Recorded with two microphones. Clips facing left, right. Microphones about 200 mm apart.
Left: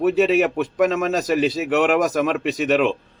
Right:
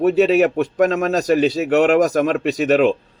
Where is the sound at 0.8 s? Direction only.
40° right (ahead or behind).